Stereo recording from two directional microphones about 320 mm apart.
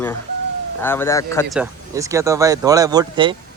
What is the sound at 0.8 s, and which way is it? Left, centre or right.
Speech, centre.